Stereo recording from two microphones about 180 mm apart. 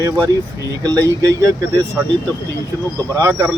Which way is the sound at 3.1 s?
15° right (ahead or behind).